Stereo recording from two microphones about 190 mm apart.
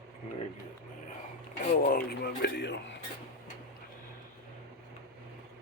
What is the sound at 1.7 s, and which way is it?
Speech, 50° left (ahead or behind).